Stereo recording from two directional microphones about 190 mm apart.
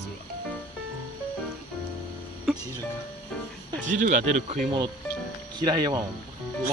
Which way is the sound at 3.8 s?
40° right (ahead or behind).